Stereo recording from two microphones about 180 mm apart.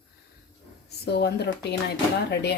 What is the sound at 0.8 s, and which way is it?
Speech, 65° left (ahead or behind).